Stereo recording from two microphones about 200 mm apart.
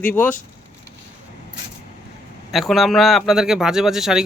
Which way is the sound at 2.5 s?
Centre (ahead or behind).